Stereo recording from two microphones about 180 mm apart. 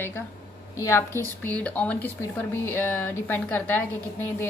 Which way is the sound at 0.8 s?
15° left (ahead or behind).